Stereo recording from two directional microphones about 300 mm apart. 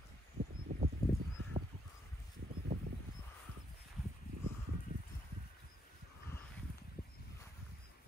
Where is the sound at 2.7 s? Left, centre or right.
Right.